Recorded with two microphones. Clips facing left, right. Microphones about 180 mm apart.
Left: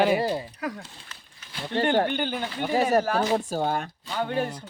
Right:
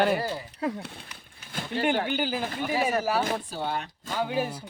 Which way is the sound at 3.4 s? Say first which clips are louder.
Left 5 dB; 45° left (ahead or behind).